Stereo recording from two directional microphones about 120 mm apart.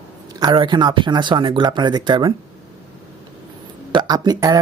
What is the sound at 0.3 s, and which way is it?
Speech, 40° right (ahead or behind).